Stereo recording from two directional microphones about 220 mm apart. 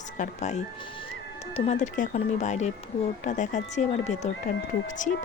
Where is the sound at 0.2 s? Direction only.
30° left (ahead or behind).